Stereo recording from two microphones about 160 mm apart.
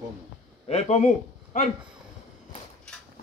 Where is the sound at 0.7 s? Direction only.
40° left (ahead or behind).